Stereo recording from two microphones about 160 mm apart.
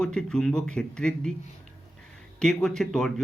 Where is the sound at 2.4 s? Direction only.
5° left (ahead or behind).